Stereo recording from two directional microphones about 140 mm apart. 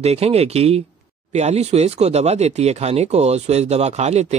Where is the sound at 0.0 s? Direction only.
50° right (ahead or behind).